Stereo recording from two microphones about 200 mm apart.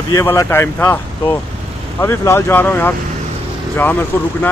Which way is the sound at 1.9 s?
10° left (ahead or behind).